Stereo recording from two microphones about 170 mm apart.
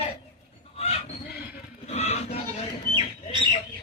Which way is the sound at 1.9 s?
40° left (ahead or behind).